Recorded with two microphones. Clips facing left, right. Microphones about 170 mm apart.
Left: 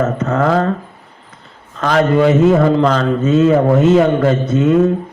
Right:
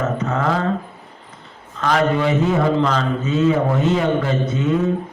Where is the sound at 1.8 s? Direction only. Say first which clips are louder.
Left 5 dB; 50° left (ahead or behind).